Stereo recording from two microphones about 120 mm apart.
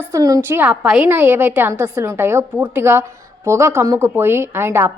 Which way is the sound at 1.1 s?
15° right (ahead or behind).